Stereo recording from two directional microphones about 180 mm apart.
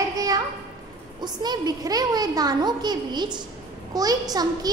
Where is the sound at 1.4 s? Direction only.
25° right (ahead or behind).